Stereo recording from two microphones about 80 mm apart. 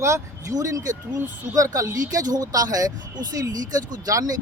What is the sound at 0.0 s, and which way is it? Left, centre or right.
Speech, right.